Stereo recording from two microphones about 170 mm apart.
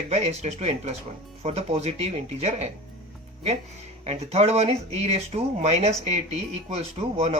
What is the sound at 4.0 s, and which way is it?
Speech, 40° right (ahead or behind).